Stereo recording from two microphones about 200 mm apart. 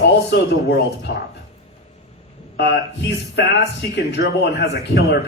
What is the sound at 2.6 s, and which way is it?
Speech, 60° left (ahead or behind).